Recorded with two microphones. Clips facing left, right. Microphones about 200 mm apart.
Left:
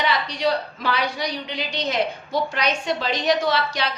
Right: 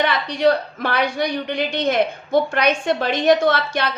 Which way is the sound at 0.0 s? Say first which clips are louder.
Right 5 dB; 55° right (ahead or behind).